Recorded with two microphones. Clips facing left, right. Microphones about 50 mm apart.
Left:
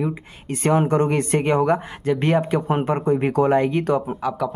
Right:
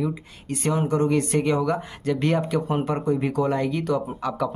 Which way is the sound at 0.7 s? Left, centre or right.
Left.